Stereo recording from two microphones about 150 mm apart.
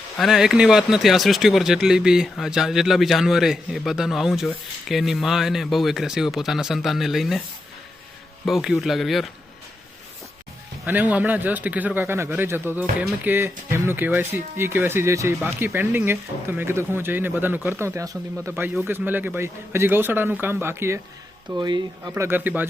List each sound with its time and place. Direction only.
0.2 s speech: 5° right (ahead or behind)
8.4 s speech: centre (ahead or behind)
10.8 s a man's voice: 10° right (ahead or behind)
21.5 s speech: 25° right (ahead or behind)
22.1 s a man's voice: 15° right (ahead or behind)